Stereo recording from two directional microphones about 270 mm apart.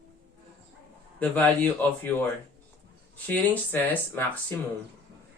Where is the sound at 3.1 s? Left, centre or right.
Centre.